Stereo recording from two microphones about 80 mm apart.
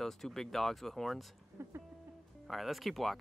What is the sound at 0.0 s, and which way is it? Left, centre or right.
Speech, centre.